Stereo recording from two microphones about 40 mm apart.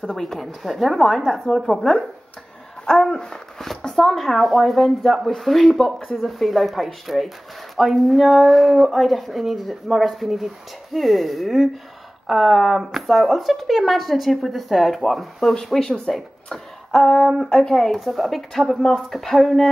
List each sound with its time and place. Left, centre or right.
0.1 s speech: centre
2.8 s speech: left
3.9 s speech: centre
16.1 s speech: centre
16.9 s speech: centre